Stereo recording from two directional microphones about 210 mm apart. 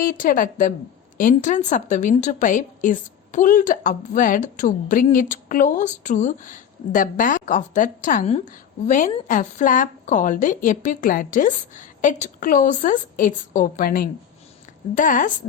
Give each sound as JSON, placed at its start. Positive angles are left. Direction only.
{"t": 0.0, "sound": "a woman's voice", "side_deg": 40}